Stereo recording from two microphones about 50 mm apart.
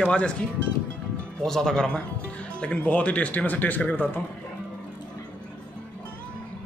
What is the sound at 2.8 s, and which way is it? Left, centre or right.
Speech, left.